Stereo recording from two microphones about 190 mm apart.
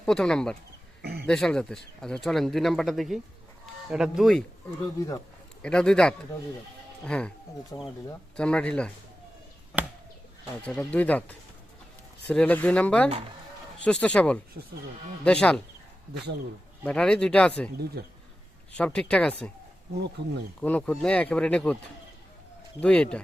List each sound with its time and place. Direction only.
0.0 s speech: 5° left (ahead or behind)
1.0 s a sound: 55° right (ahead or behind)
1.3 s speech: 5° left (ahead or behind)
5.6 s speech: 5° left (ahead or behind)
7.7 s speech: 20° left (ahead or behind)
8.4 s speech: 5° left (ahead or behind)
9.7 s chop: centre (ahead or behind)
10.6 s speech: 5° left (ahead or behind)
16.8 s speech: 5° left (ahead or behind)
18.0 s speech: 55° right (ahead or behind)
18.7 s speech: 5° left (ahead or behind)
20.6 s speech: 5° left (ahead or behind)
22.8 s speech: 5° left (ahead or behind)